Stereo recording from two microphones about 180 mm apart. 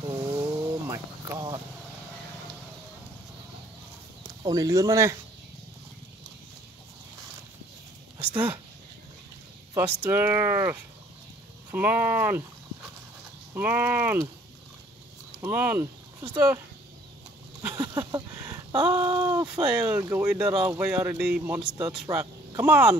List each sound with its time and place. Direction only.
0.0 s vehicle: 20° right (ahead or behind)
4.4 s speech: 20° right (ahead or behind)
8.3 s speech: 10° right (ahead or behind)
9.8 s speech: 10° right (ahead or behind)
13.6 s speech: 10° right (ahead or behind)
15.4 s speech: 10° right (ahead or behind)
17.6 s a sound: 10° right (ahead or behind)
17.9 s speech: 20° right (ahead or behind)
18.9 s a sound: 15° right (ahead or behind)
19.4 s speech: 5° right (ahead or behind)